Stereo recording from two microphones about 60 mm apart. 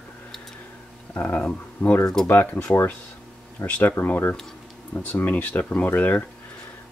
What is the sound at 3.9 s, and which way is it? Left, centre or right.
Speech, left.